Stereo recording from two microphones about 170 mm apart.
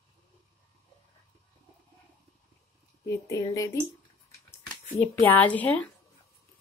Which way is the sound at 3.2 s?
20° left (ahead or behind).